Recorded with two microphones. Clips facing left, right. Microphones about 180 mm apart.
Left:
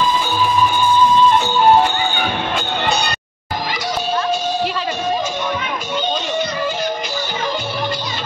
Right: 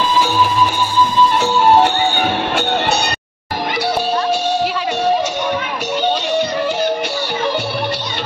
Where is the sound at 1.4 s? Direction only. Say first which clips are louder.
Right 1 dB; 75° right (ahead or behind).